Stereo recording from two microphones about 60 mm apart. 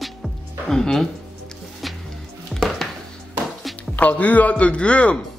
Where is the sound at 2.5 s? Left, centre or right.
Centre.